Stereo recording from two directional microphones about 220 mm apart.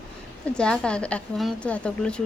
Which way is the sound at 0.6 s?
5° left (ahead or behind).